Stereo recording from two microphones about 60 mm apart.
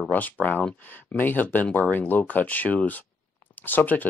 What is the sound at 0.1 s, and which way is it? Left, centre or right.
Speech, left.